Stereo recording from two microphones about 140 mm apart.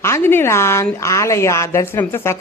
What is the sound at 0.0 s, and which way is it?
A woman's voice, 15° left (ahead or behind).